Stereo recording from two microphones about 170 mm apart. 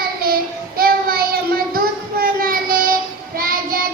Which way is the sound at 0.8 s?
60° right (ahead or behind).